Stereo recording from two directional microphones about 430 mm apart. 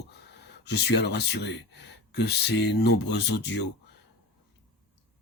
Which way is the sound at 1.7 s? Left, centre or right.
Left.